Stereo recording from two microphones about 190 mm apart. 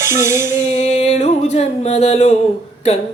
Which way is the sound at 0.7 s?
35° left (ahead or behind).